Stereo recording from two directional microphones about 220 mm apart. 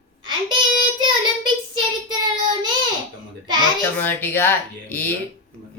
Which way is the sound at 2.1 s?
20° right (ahead or behind).